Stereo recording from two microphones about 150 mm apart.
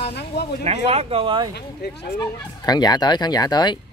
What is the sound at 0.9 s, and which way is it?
Speech, 40° right (ahead or behind).